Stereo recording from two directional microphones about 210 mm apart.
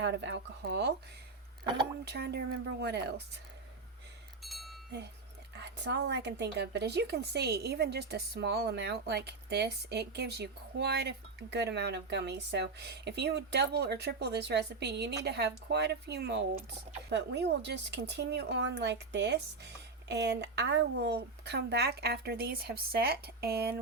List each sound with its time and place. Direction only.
0.0 s speech: 55° right (ahead or behind)
2.0 s a woman's voice: 50° right (ahead or behind)
4.4 s chink: centre (ahead or behind)
5.5 s a woman's voice: 55° right (ahead or behind)